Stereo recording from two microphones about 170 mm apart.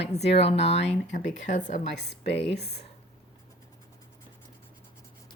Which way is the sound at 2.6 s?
75° left (ahead or behind).